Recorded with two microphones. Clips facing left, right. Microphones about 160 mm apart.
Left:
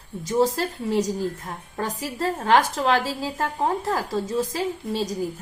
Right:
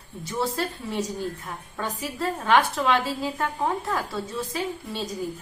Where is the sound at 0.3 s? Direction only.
40° left (ahead or behind).